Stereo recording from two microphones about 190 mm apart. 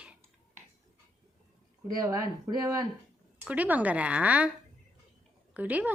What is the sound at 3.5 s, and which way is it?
Speech, 10° right (ahead or behind).